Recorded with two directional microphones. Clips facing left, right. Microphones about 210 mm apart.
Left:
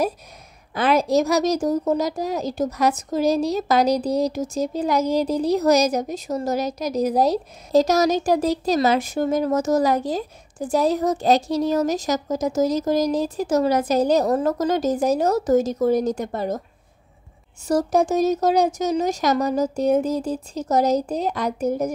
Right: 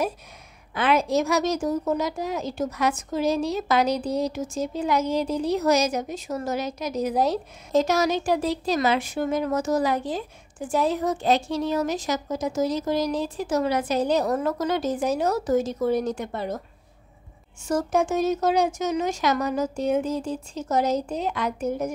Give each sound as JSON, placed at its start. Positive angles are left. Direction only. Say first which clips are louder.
{"t": 0.7, "sound": "a woman's voice", "louder": "left 3 dB", "side_deg": 40}
{"t": 17.6, "sound": "a woman's voice", "louder": "left 4 dB", "side_deg": 35}